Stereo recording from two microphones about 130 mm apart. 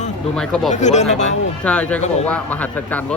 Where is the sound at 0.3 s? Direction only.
5° left (ahead or behind).